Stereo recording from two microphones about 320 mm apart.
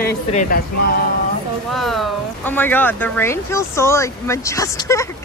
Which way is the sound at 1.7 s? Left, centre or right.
Centre.